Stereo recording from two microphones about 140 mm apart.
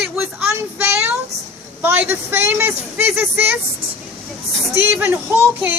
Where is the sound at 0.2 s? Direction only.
10° right (ahead or behind).